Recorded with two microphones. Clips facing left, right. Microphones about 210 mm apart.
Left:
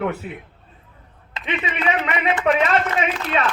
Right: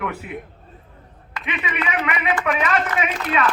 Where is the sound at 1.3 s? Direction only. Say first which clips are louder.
Left 1 dB; 25° left (ahead or behind).